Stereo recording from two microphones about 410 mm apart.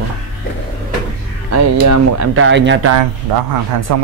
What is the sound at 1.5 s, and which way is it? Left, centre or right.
Speech, right.